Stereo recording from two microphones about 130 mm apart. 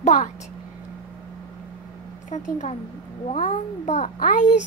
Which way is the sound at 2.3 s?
65° left (ahead or behind).